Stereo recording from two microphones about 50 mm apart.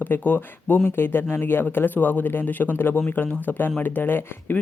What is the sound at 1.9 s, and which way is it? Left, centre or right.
Speech, left.